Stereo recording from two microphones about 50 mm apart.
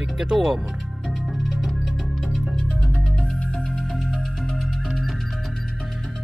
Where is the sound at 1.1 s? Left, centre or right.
Centre.